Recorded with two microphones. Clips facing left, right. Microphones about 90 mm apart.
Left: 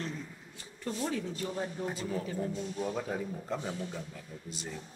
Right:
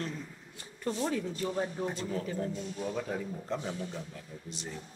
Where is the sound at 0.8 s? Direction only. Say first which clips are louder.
Right 2 dB; 20° right (ahead or behind).